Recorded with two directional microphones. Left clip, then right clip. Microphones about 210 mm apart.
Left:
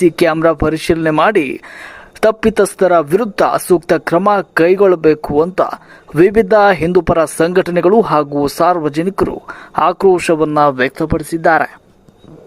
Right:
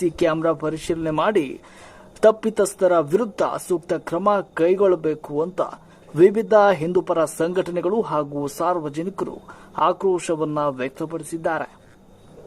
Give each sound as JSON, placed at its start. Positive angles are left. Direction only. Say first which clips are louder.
{"t": 0.0, "sound": "speech", "louder": "left 9 dB", "side_deg": 20}